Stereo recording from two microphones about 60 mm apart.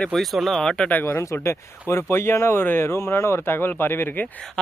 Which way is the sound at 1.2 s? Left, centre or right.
Left.